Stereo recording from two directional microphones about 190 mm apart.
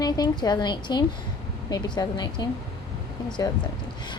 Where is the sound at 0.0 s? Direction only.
20° left (ahead or behind).